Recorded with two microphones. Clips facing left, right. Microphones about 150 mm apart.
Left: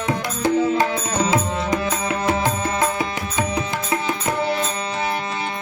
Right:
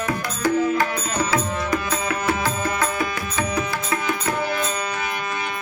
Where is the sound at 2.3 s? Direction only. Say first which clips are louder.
Left 3 dB; 20° left (ahead or behind).